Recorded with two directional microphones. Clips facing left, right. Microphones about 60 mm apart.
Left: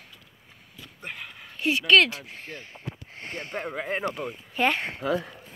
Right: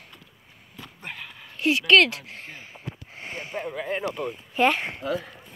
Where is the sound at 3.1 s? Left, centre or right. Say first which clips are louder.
Right 1 dB; centre.